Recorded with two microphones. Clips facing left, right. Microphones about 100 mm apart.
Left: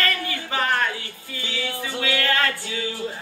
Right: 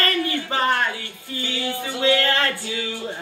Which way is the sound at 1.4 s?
30° right (ahead or behind).